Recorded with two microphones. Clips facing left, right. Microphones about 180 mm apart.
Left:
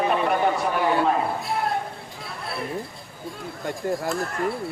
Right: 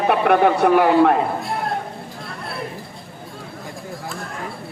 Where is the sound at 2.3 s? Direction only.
Centre (ahead or behind).